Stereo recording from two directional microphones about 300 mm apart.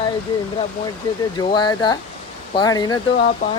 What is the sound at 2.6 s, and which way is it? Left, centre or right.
Speech, centre.